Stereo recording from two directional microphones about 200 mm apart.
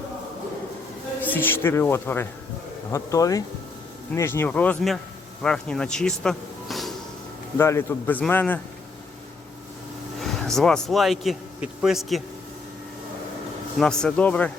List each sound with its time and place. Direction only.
1.2 s speech: 10° left (ahead or behind)
7.6 s speech: 15° left (ahead or behind)
10.2 s a man's voice: centre (ahead or behind)
13.7 s speech: 5° left (ahead or behind)